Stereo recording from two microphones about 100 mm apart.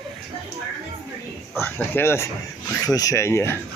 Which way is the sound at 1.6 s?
25° left (ahead or behind).